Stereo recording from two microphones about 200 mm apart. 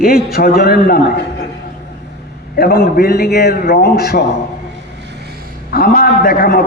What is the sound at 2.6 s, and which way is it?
A man's voice, 50° left (ahead or behind).